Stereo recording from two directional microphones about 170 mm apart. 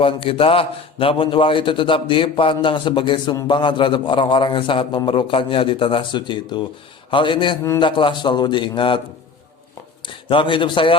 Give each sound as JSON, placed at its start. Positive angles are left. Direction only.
{"t": 0.0, "sound": "a man's voice", "side_deg": 30}
{"t": 10.1, "sound": "a man's voice", "side_deg": 30}